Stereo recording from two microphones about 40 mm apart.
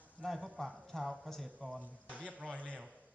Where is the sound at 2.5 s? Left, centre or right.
Left.